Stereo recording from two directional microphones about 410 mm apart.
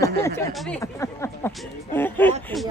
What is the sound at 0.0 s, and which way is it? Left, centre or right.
Speech, centre.